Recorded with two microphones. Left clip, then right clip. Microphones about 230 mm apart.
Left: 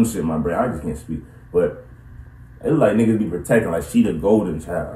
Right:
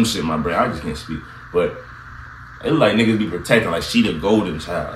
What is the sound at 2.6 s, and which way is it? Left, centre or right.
Speech, right.